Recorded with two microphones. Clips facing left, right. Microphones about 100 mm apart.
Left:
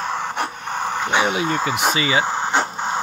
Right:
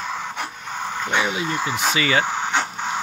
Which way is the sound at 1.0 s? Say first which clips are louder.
Left 3 dB; 30° left (ahead or behind).